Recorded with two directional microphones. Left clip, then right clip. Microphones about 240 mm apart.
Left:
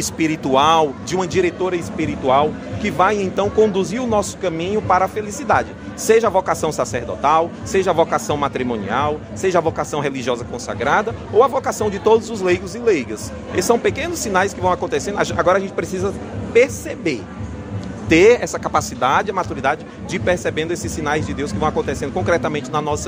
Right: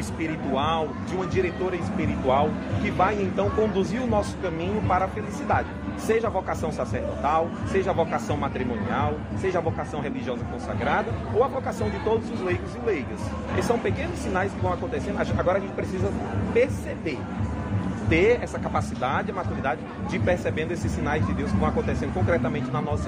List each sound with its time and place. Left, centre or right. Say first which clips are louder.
0.2 s speech: left 11 dB; left